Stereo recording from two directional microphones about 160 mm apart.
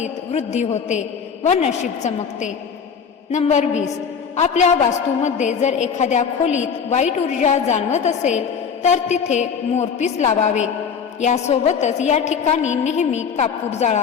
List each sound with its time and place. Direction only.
0.0 s a woman's voice: 45° left (ahead or behind)